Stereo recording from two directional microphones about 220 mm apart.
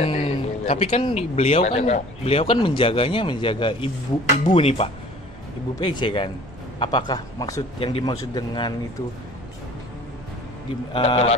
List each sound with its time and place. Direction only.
0.0 s a man's voice: 25° left (ahead or behind)
10.9 s a man's voice: 25° left (ahead or behind)